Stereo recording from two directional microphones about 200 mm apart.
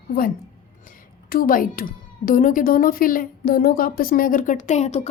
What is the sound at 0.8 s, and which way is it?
A woman's voice, 45° left (ahead or behind).